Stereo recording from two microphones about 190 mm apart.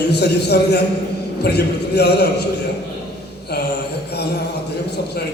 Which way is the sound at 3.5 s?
60° left (ahead or behind).